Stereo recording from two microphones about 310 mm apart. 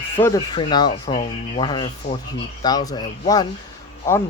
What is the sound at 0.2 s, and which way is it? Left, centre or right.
Speech, centre.